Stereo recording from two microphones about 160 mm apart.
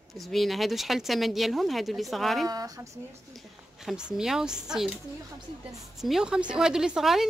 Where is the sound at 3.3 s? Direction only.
Centre (ahead or behind).